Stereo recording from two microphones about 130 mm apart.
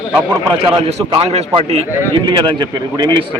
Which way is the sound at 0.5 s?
50° right (ahead or behind).